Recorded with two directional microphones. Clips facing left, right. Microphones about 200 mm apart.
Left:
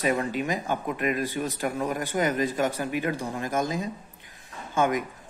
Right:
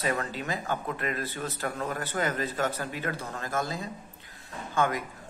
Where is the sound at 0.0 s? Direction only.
15° left (ahead or behind).